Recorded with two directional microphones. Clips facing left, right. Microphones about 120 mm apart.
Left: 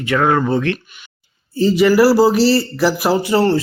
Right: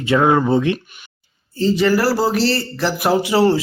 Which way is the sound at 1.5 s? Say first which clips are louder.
Left 3 dB; 10° left (ahead or behind).